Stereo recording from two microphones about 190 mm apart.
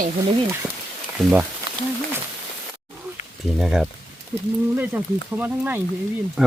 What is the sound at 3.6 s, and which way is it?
Speech, 5° right (ahead or behind).